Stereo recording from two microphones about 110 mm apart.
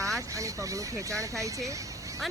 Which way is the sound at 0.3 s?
30° right (ahead or behind).